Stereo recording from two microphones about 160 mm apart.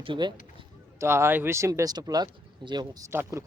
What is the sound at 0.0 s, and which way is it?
Speech, 30° right (ahead or behind).